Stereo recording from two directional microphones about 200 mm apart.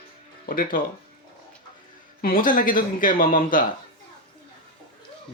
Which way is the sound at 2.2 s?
45° left (ahead or behind).